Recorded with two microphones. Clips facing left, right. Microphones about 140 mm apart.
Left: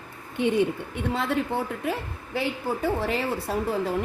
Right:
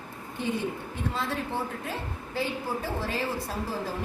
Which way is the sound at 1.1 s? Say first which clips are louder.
Left 7 dB; 65° left (ahead or behind).